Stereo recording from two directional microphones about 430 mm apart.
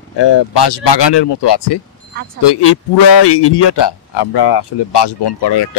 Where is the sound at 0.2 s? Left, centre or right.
Left.